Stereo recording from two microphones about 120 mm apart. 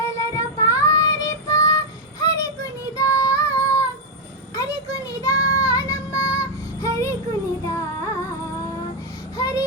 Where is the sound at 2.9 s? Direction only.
25° left (ahead or behind).